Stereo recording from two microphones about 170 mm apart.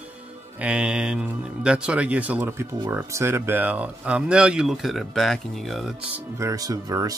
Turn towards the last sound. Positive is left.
turn(degrees=-20)  # may be behind; listen again after turning